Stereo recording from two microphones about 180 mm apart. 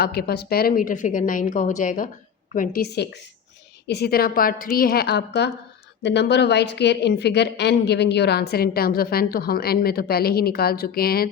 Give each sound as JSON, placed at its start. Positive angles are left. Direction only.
{"t": 0.0, "sound": "a woman's voice", "side_deg": 60}